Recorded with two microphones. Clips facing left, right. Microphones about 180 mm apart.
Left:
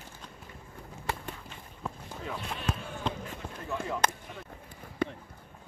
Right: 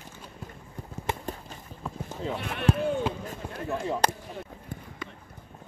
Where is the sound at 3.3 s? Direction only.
30° right (ahead or behind).